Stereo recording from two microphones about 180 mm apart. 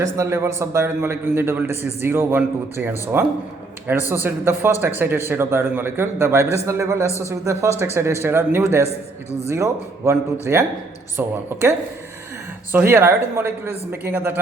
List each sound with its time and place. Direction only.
0.0 s a man's voice: 15° right (ahead or behind)